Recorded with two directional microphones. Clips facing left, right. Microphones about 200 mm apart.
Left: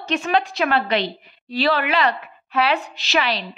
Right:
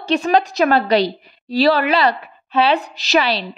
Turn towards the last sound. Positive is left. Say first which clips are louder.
# right 5 dB
turn(degrees=-35)  # may be behind; listen again after turning